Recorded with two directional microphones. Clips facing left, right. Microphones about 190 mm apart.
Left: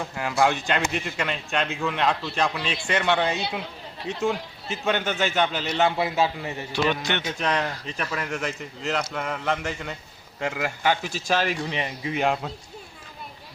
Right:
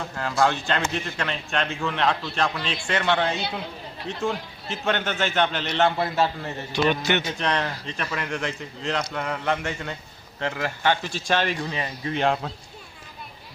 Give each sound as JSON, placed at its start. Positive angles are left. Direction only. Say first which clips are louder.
{"t": 0.2, "sound": "speech", "louder": "even", "side_deg": 15}
{"t": 6.8, "sound": "a man's voice", "louder": "right 4 dB", "side_deg": -5}
{"t": 7.3, "sound": "speech", "louder": "even", "side_deg": 5}
{"t": 11.7, "sound": "speech", "louder": "even", "side_deg": 20}
{"t": 12.1, "sound": "speech", "louder": "right 1 dB", "side_deg": 5}